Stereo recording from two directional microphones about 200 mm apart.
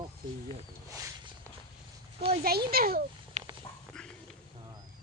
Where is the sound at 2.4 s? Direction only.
50° right (ahead or behind).